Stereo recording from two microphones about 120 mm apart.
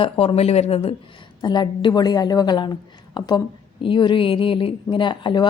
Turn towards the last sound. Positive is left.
turn(degrees=40)  # may be behind; listen again after turning